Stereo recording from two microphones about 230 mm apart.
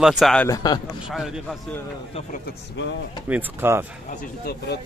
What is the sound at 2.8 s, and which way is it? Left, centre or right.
Speech, left.